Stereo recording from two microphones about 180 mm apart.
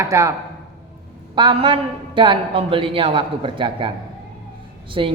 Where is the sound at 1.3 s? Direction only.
30° right (ahead or behind).